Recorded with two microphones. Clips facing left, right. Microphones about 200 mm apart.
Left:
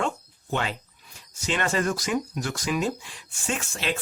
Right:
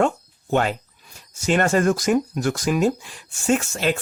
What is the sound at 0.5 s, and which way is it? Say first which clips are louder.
Speech: right 8 dB; 50° right (ahead or behind).